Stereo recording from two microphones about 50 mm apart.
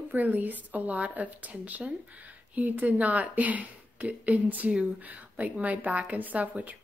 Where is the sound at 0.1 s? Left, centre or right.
Right.